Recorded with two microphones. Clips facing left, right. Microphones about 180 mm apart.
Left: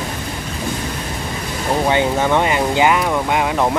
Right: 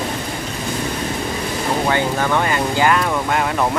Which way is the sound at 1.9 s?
20° left (ahead or behind).